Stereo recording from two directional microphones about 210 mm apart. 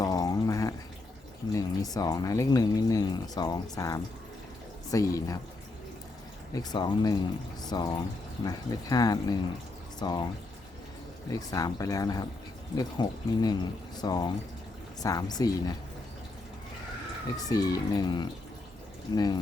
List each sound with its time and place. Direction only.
0.0 s a sound: 20° left (ahead or behind)
1.5 s speech: 15° left (ahead or behind)
6.5 s speech: 20° left (ahead or behind)
11.3 s speech: 15° left (ahead or behind)
17.3 s speech: 15° left (ahead or behind)